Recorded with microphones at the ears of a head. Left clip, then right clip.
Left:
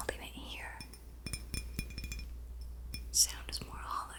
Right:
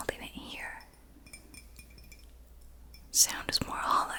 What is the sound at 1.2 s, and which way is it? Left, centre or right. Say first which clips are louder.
Chink: left 7 dB; left.